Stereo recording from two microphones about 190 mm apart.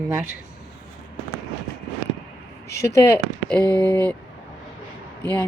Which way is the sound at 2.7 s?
15° left (ahead or behind).